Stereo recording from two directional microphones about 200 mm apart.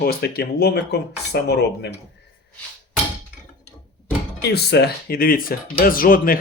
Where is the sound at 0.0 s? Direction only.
50° left (ahead or behind).